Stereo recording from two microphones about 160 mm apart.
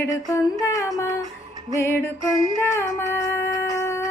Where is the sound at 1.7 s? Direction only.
15° left (ahead or behind).